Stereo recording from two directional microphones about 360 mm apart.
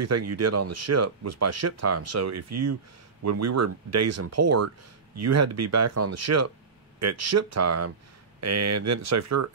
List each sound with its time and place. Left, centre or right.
0.0 s speech: right